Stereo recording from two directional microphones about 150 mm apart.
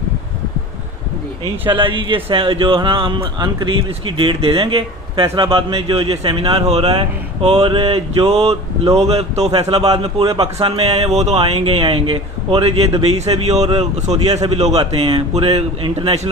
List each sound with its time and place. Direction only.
1.7 s speech: 35° right (ahead or behind)
5.2 s a man's voice: 20° right (ahead or behind)
5.5 s speech: 35° right (ahead or behind)